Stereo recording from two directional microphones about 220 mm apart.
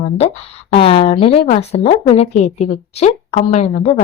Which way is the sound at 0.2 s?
25° left (ahead or behind).